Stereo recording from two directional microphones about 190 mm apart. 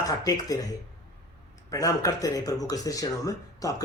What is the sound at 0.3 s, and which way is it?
Speech, 20° left (ahead or behind).